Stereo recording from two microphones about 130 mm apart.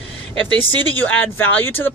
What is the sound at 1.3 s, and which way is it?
Speech, 15° left (ahead or behind).